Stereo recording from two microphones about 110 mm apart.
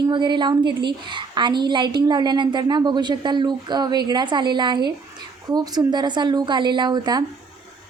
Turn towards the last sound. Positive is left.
turn(degrees=-40)  # may be behind; listen again after turning